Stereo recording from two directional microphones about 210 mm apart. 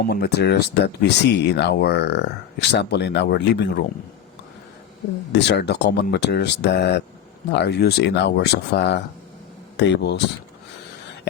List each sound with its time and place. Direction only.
0.0 s speech: 50° left (ahead or behind)
5.3 s speech: 55° left (ahead or behind)